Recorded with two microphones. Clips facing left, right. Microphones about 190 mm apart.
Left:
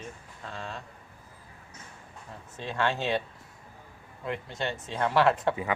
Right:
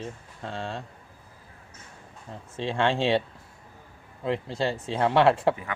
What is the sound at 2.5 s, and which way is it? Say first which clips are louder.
Speech: right 4 dB; 25° right (ahead or behind).